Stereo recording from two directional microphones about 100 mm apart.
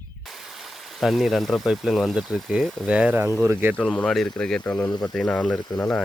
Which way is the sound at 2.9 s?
10° right (ahead or behind).